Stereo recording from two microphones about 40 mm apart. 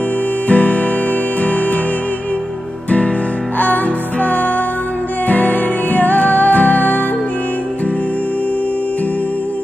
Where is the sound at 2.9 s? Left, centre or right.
Left.